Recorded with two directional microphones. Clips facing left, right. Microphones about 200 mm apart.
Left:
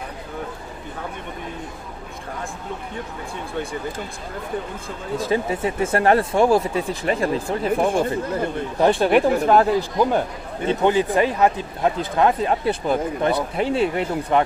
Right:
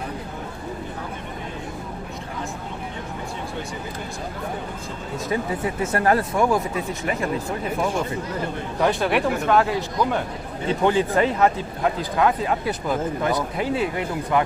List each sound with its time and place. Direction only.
5.1 s speech: 30° left (ahead or behind)
10.7 s speech: 20° left (ahead or behind)